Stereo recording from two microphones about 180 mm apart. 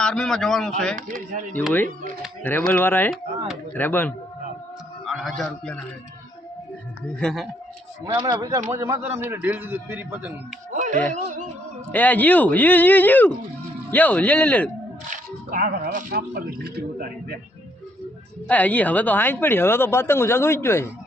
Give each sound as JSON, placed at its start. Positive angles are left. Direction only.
{"t": 0.0, "sound": "a man's voice", "side_deg": 5}
{"t": 0.9, "sound": "speech", "side_deg": -50}
{"t": 1.5, "sound": "speech", "side_deg": 10}
{"t": 5.0, "sound": "a man's voice", "side_deg": 0}
{"t": 7.2, "sound": "a man's voice", "side_deg": 5}
{"t": 8.1, "sound": "speech", "side_deg": -25}
{"t": 10.7, "sound": "a sound", "side_deg": -45}
{"t": 11.1, "sound": "speech", "side_deg": -40}
{"t": 11.9, "sound": "speech", "side_deg": 10}
{"t": 15.1, "sound": "speech", "side_deg": -50}
{"t": 18.4, "sound": "speech", "side_deg": 10}